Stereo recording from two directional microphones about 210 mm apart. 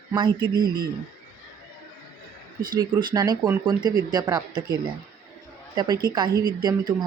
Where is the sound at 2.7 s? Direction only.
20° right (ahead or behind).